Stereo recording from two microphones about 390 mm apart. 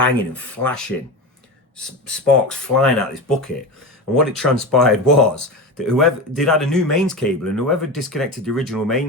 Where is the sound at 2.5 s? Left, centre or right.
Centre.